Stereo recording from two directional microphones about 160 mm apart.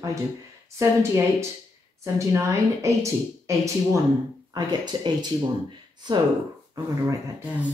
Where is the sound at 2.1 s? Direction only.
20° right (ahead or behind).